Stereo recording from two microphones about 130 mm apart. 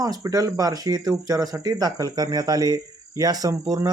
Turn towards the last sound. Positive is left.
turn(degrees=-25)  # may be behind; listen again after turning